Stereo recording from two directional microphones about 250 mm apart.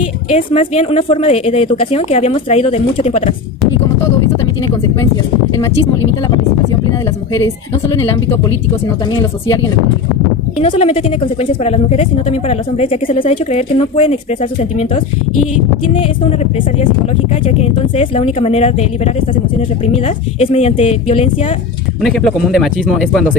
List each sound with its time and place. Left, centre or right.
0.3 s a woman's voice: left
9.1 s speech: centre
10.6 s a woman's voice: left
17.4 s a woman's voice: left
22.0 s speech: centre